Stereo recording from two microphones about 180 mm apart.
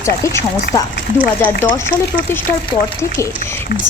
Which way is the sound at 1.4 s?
10° left (ahead or behind).